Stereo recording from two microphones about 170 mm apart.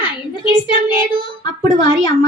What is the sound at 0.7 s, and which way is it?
Speech, 25° left (ahead or behind).